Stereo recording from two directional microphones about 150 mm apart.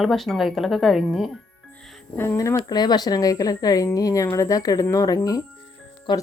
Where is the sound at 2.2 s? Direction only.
20° left (ahead or behind).